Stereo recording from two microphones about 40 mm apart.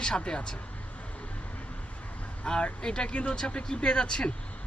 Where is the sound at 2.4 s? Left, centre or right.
Left.